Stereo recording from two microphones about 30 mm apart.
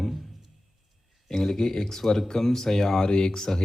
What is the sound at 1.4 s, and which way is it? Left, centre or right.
Speech, centre.